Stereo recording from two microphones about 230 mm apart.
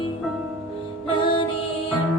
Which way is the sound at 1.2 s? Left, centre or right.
Left.